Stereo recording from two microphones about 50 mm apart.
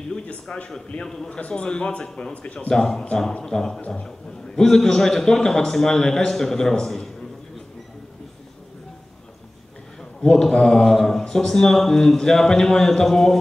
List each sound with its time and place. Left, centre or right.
0.1 s a man's voice: centre
2.7 s a man's voice: centre
10.3 s speech: centre